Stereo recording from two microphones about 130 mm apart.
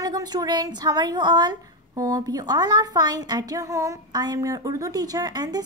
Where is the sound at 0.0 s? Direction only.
30° right (ahead or behind).